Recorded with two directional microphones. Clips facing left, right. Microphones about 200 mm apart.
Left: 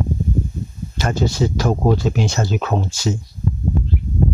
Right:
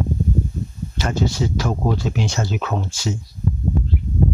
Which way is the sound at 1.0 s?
40° left (ahead or behind).